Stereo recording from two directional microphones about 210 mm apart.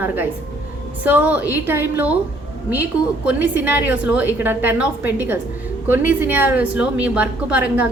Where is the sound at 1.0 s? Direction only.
5° right (ahead or behind).